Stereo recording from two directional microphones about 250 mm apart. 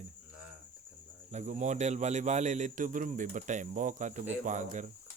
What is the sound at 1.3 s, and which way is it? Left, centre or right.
Speech, right.